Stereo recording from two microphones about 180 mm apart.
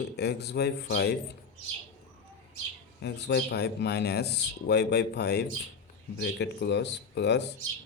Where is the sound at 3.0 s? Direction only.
70° left (ahead or behind).